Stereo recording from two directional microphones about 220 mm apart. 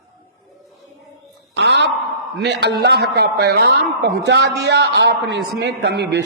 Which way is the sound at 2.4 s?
50° right (ahead or behind).